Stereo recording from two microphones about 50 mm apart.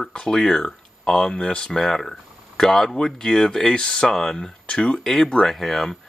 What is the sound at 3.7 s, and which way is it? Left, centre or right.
Speech, centre.